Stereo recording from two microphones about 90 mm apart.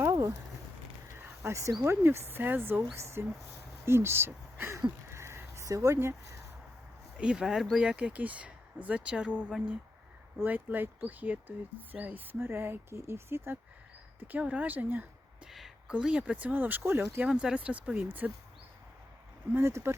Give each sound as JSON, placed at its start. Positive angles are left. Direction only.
{"t": 1.5, "sound": "speech", "side_deg": -35}
{"t": 5.1, "sound": "a sound", "side_deg": -30}
{"t": 7.2, "sound": "speech", "side_deg": -10}
{"t": 15.4, "sound": "speech", "side_deg": -5}
{"t": 19.5, "sound": "speech", "side_deg": -30}